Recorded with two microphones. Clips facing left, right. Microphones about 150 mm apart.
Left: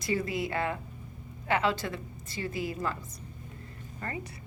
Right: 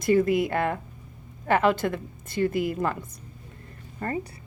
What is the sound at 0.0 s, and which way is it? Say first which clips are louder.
A woman's voice: right 10 dB; 55° right (ahead or behind).